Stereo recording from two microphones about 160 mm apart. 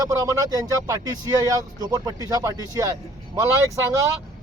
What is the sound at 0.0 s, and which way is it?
Speech, 20° right (ahead or behind).